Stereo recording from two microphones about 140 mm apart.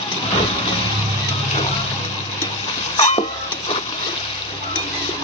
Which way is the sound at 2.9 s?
50° left (ahead or behind).